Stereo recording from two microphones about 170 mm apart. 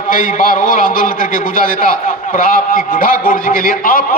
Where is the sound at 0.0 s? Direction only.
50° left (ahead or behind).